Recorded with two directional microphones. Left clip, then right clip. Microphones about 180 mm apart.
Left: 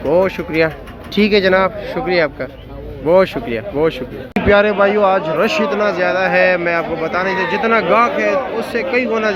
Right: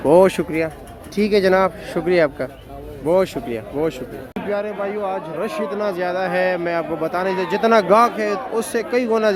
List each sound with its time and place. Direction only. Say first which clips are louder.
0.1 s speech: right 2 dB; 30° right (ahead or behind)
1.1 s a man's voice: left 3 dB; 15° right (ahead or behind)
3.1 s a man's voice: left 5 dB; 15° right (ahead or behind); by 9.3 s 35° right (ahead or behind)